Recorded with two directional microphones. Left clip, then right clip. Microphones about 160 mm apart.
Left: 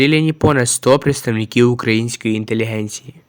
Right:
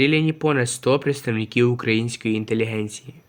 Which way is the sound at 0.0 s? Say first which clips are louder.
Left 5 dB; 40° left (ahead or behind).